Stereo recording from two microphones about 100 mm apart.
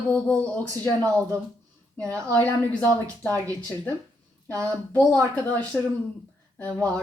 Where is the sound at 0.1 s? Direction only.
15° left (ahead or behind).